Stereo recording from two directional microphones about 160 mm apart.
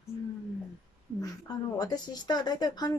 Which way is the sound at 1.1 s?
25° left (ahead or behind).